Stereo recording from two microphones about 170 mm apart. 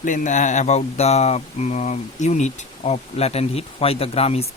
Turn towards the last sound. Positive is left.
turn(degrees=35)  # may be behind; listen again after turning